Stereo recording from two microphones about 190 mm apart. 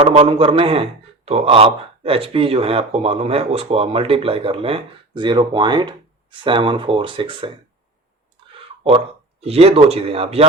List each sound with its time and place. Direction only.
0.0 s a man's voice: 30° right (ahead or behind)
9.4 s speech: 30° right (ahead or behind)